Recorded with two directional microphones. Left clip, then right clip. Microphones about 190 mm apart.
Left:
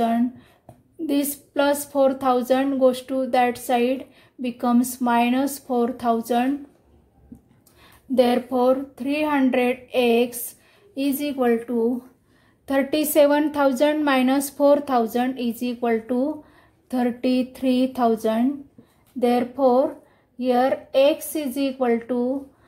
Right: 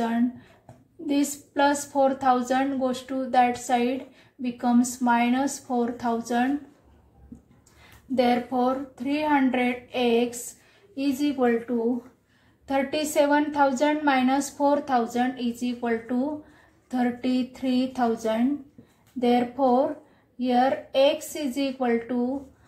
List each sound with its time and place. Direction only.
0.0 s a sound: 55° left (ahead or behind)
1.0 s a woman's voice: 55° left (ahead or behind)
8.1 s a woman's voice: 55° left (ahead or behind)
12.6 s a woman's voice: 60° left (ahead or behind)